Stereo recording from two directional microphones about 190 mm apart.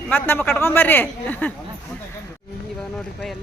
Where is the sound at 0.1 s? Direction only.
10° left (ahead or behind).